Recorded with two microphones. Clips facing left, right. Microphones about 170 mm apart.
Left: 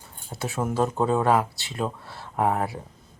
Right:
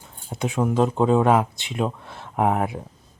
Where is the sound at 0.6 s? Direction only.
5° left (ahead or behind).